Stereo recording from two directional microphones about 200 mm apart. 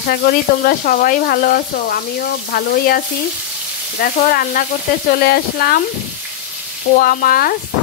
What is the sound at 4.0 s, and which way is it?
Frying, 50° left (ahead or behind).